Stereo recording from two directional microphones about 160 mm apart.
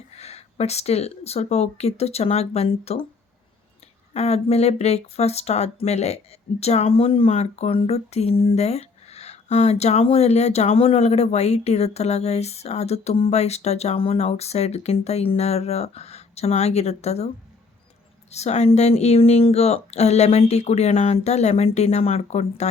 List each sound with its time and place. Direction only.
0.2 s speech: 40° left (ahead or behind)
4.1 s speech: 40° left (ahead or behind)
18.3 s speech: 45° left (ahead or behind)